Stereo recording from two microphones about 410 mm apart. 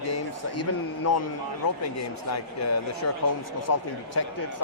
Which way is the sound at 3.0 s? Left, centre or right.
Left.